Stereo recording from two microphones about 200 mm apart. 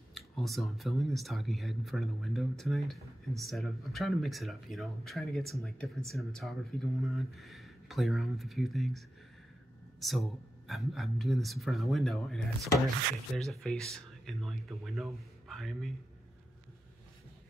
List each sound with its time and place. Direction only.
0.1 s speech: centre (ahead or behind)